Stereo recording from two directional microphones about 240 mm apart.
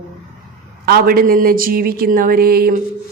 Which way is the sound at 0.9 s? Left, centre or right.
Right.